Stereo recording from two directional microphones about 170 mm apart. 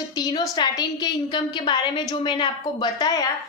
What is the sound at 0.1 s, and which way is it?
A woman's voice, 25° left (ahead or behind).